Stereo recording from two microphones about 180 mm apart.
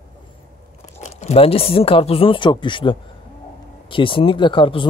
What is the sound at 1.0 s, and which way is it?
Speech, 35° left (ahead or behind).